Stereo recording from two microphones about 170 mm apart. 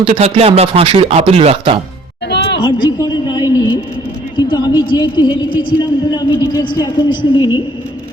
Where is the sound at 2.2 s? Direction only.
80° left.